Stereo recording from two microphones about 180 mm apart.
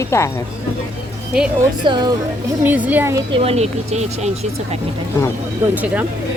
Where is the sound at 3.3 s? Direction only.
35° right (ahead or behind).